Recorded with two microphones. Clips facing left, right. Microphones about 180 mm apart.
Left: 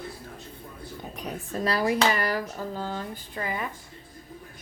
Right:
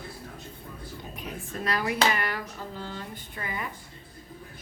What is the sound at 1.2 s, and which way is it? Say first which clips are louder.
Speech: left 5 dB; 35° left (ahead or behind).